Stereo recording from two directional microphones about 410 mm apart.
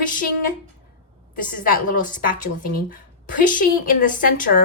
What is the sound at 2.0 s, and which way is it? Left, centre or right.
A woman's voice, centre.